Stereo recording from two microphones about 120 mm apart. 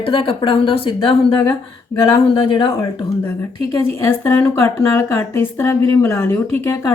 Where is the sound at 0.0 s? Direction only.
45° left (ahead or behind).